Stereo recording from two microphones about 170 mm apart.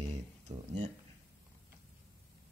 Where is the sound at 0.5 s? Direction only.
40° right (ahead or behind).